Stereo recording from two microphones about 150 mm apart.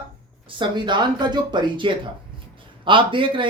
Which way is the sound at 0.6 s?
30° right (ahead or behind).